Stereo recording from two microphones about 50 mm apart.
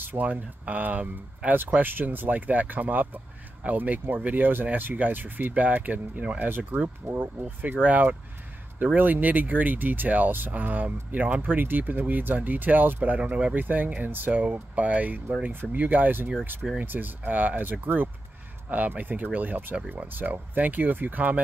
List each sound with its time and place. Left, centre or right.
0.0 s speech: right
13.2 s speech: right
13.6 s speech: right